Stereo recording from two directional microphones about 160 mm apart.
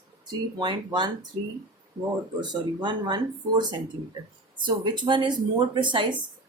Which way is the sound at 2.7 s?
25° right (ahead or behind).